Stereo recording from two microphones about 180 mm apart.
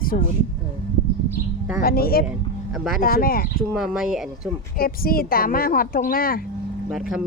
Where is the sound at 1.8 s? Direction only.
55° left (ahead or behind).